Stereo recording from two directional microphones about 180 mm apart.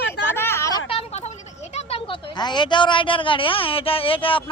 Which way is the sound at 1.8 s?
30° left (ahead or behind).